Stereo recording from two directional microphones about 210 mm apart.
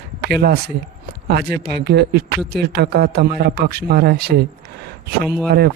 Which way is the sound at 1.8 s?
50° right (ahead or behind).